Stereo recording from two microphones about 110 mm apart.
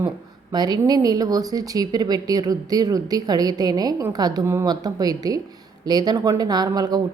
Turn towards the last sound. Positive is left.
turn(degrees=-35)  # may be behind; listen again after turning